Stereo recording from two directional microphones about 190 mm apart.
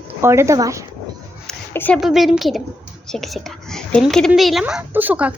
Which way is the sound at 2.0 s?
Centre (ahead or behind).